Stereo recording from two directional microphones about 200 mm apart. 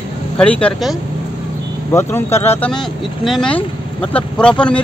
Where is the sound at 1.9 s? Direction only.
10° left (ahead or behind).